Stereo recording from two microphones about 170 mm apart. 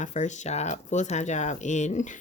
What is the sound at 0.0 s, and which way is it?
Speech, 45° left (ahead or behind).